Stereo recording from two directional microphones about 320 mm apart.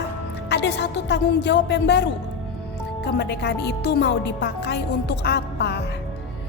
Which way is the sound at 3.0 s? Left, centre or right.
Left.